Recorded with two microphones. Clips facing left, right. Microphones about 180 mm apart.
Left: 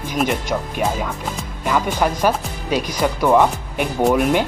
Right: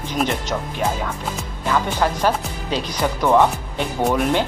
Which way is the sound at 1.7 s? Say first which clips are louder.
Left 1 dB; 10° left (ahead or behind).